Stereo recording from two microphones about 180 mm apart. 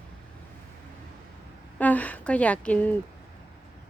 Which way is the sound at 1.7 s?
10° left (ahead or behind).